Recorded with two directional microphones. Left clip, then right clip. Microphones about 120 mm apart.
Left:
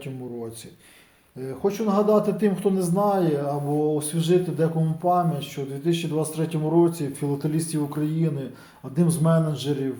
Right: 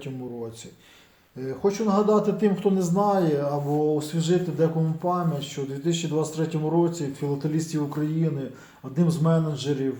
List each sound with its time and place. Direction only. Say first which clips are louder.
1.4 s a man's voice: right 1 dB; 15° left (ahead or behind)
9.0 s a man's voice: left 2 dB; 35° left (ahead or behind)